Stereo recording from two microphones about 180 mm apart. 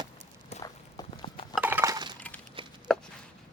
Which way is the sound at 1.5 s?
10° right (ahead or behind).